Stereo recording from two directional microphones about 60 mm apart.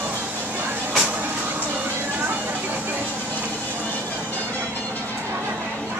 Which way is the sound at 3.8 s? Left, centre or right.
Left.